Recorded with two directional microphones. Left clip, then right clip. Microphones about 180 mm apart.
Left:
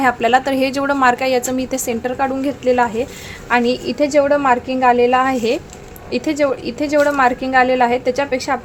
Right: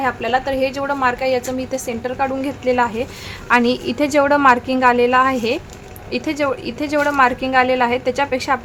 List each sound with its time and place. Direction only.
0.0 s a woman's voice: 25° left (ahead or behind); by 8.5 s 5° left (ahead or behind)